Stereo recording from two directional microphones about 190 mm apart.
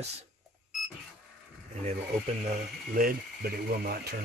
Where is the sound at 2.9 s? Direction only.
50° right (ahead or behind).